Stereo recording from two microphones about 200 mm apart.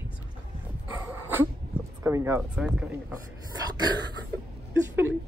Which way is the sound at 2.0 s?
15° right (ahead or behind).